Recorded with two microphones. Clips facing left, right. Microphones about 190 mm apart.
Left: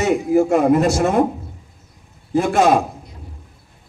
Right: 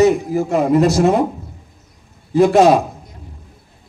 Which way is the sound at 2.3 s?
35° right (ahead or behind).